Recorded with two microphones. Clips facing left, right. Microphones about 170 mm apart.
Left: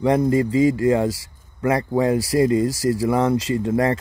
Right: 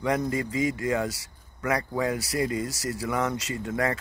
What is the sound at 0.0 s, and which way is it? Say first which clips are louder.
Speech: left 9 dB; 30° left (ahead or behind).